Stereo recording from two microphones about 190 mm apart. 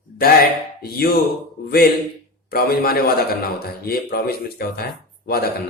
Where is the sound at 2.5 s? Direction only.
55° left (ahead or behind).